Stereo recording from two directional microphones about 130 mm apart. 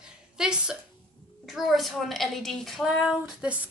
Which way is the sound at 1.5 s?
Centre (ahead or behind).